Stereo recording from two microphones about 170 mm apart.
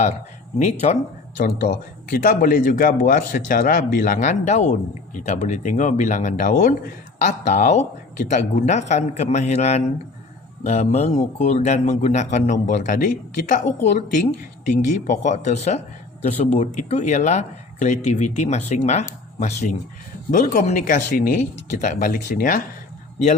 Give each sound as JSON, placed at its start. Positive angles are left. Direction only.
{"t": 0.6, "sound": "speech", "side_deg": 40}
{"t": 1.4, "sound": "speech", "side_deg": 60}
{"t": 14.7, "sound": "speech", "side_deg": 45}
{"t": 20.3, "sound": "speech", "side_deg": 55}